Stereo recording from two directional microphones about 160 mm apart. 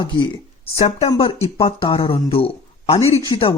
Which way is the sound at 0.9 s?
45° left (ahead or behind).